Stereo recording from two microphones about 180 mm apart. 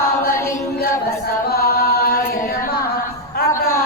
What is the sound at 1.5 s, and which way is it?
Chant, 60° left (ahead or behind).